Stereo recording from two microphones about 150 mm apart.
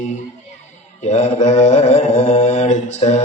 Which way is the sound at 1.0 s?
50° left (ahead or behind).